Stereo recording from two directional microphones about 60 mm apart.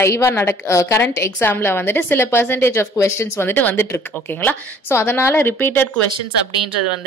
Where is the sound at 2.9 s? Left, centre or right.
Left.